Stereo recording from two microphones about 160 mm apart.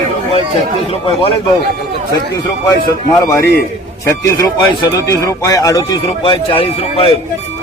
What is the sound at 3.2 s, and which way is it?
A man's voice, 15° left (ahead or behind).